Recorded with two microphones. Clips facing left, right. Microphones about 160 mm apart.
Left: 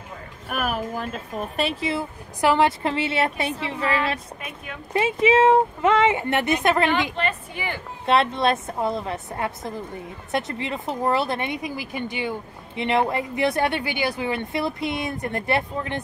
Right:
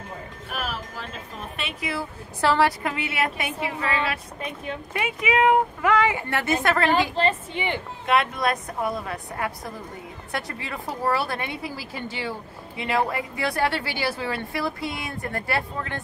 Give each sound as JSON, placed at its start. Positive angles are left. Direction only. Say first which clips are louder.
{"t": 0.5, "sound": "speech", "louder": "left 7 dB", "side_deg": 55}
{"t": 1.6, "sound": "a woman's voice", "louder": "left 5 dB", "side_deg": 30}
{"t": 2.8, "sound": "speech", "louder": "left 4 dB", "side_deg": 30}
{"t": 4.9, "sound": "speech", "louder": "left 6 dB", "side_deg": 30}
{"t": 7.2, "sound": "a woman's voice", "louder": "right 3 dB", "side_deg": -25}
{"t": 8.1, "sound": "speech", "louder": "left 3 dB", "side_deg": 30}